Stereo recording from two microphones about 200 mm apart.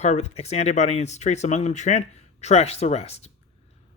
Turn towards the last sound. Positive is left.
turn(degrees=30)  # may be behind; listen again after turning